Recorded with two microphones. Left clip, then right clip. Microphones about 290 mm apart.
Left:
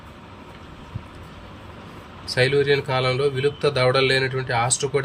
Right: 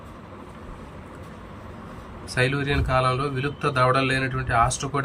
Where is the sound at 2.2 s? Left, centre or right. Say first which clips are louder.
Left 5 dB; centre.